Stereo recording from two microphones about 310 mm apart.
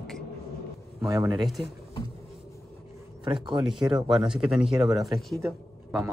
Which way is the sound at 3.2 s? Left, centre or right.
Centre.